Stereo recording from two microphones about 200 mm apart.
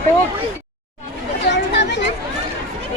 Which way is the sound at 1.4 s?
60° left (ahead or behind).